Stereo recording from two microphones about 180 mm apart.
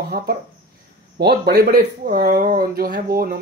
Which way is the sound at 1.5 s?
55° right (ahead or behind).